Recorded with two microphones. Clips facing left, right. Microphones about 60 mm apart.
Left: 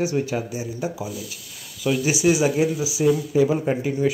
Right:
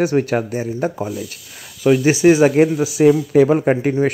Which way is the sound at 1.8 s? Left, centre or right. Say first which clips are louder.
Right 8 dB; right.